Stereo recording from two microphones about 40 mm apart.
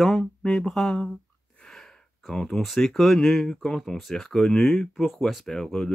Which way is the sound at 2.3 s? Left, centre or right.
Centre.